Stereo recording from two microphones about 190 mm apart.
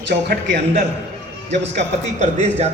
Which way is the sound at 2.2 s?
35° right (ahead or behind).